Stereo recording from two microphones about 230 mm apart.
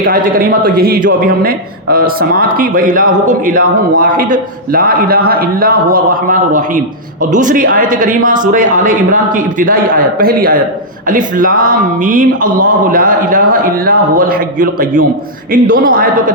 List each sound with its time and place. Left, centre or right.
0.0 s speech: right